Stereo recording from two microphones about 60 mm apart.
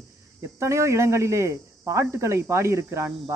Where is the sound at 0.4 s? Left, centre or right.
Right.